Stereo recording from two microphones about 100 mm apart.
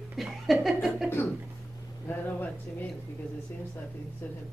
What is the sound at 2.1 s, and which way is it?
Speech, 20° left (ahead or behind).